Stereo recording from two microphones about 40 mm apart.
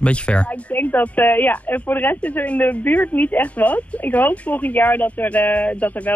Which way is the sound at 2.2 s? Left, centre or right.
Left.